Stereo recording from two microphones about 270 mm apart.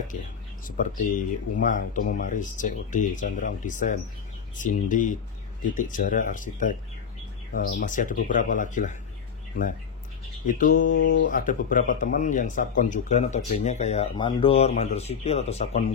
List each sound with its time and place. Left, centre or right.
0.7 s speech: left
10.4 s speech: left